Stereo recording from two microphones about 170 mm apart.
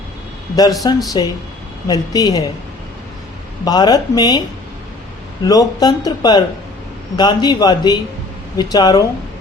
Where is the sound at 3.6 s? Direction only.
25° left (ahead or behind).